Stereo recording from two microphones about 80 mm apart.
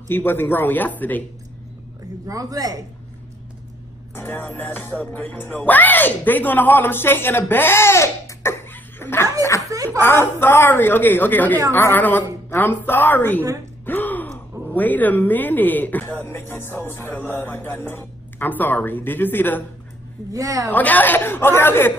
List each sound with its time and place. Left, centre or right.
0.1 s a woman's voice: left
2.2 s speech: right
4.1 s a woman's voice: left
13.8 s gasp: left
14.7 s a woman's voice: left
20.3 s speech: right
20.7 s a woman's voice: left